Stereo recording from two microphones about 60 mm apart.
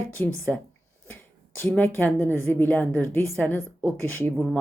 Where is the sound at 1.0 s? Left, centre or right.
Left.